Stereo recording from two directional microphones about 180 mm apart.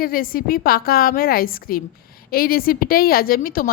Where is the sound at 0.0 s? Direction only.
55° left (ahead or behind).